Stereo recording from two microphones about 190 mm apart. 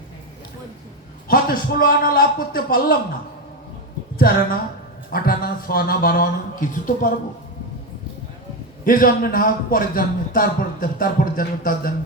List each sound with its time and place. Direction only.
1.3 s a man's voice: 50° left (ahead or behind)
5.1 s a man's voice: 50° left (ahead or behind)
8.8 s a man's voice: 50° left (ahead or behind)